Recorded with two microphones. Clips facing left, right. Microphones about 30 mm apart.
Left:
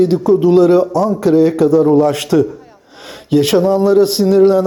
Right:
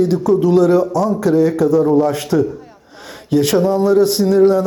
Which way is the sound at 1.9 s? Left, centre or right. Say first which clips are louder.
Left 3 dB; left.